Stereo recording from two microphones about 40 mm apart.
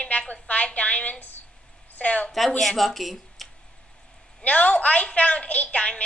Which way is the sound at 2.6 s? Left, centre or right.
Centre.